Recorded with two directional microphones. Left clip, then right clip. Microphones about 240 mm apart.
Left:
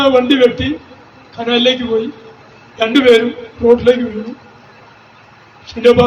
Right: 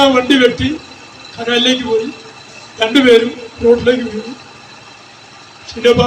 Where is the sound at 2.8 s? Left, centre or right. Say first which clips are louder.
Even; right.